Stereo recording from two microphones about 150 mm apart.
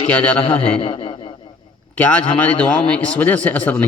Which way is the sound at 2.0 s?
10° left (ahead or behind).